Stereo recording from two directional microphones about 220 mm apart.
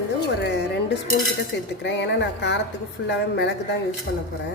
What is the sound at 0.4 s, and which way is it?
Music, 50° left (ahead or behind).